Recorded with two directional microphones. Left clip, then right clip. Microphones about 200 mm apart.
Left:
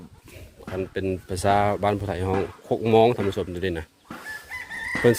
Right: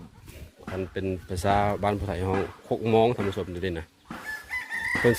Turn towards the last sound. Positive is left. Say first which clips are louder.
# left 3 dB
turn(degrees=30)  # may be behind; listen again after turning